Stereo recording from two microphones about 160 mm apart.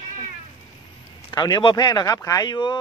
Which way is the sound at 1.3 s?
25° left (ahead or behind).